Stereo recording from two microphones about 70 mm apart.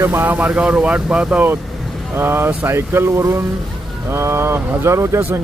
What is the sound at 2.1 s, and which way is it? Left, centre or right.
Speech, right.